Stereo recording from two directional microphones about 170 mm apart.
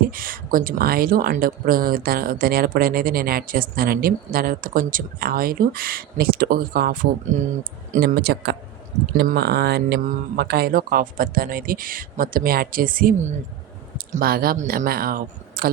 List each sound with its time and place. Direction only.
0.0 s speech: 55° right (ahead or behind)
14.1 s speech: 60° right (ahead or behind)